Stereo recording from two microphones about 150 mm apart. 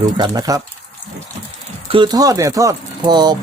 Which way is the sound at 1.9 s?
30° right (ahead or behind).